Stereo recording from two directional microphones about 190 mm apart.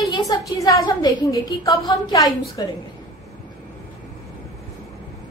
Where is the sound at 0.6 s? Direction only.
20° left (ahead or behind).